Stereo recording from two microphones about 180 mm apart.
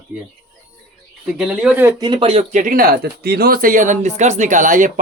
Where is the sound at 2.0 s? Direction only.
30° right (ahead or behind).